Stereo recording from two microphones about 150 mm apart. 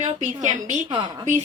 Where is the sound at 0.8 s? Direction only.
30° right (ahead or behind).